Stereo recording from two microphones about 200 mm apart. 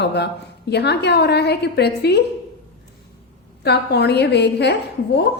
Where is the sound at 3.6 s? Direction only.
55° left (ahead or behind).